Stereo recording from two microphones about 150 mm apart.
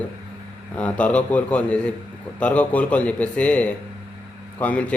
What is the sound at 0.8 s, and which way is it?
A man's voice, 10° left (ahead or behind).